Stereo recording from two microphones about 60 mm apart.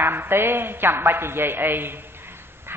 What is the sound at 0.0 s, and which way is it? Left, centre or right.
A man's voice, right.